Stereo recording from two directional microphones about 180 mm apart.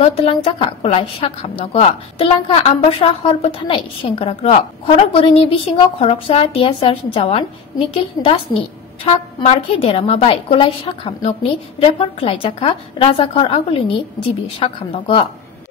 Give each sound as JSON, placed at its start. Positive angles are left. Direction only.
{"t": 0.0, "sound": "a woman's voice", "side_deg": 35}